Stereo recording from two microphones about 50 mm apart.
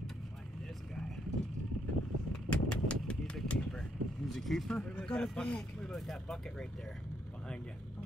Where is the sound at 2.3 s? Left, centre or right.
Left.